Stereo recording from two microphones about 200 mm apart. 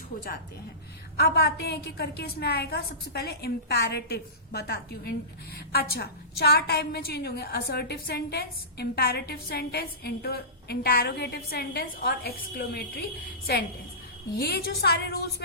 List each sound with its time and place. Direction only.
1.1 s a woman's voice: 50° left (ahead or behind)
14.3 s a woman's voice: 55° left (ahead or behind)